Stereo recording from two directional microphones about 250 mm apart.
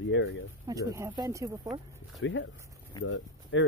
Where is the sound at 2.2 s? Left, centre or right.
Left.